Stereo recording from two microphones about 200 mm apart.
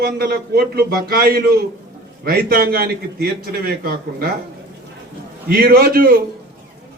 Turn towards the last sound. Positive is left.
turn(degrees=-50)  # may be behind; listen again after turning